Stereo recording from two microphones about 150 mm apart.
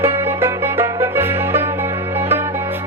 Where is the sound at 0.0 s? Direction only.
15° right (ahead or behind).